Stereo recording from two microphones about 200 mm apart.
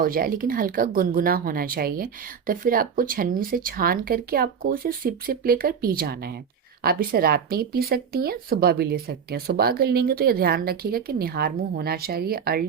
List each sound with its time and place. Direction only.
0.0 s speech: 45° right (ahead or behind)